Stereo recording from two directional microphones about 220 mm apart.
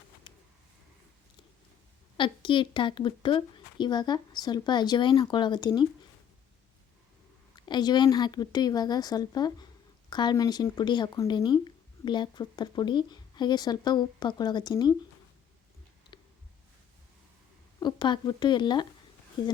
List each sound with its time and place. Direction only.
0.3 s a sound: 20° left (ahead or behind)
2.1 s speech: 20° left (ahead or behind)
7.5 s a woman's voice: 20° left (ahead or behind)
17.7 s speech: 20° left (ahead or behind)